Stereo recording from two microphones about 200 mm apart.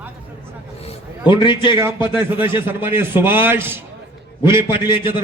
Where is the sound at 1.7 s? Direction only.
10° right (ahead or behind).